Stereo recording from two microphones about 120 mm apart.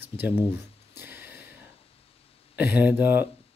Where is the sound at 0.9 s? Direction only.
15° right (ahead or behind).